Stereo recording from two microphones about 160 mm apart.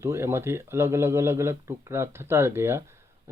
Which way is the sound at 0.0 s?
15° right (ahead or behind).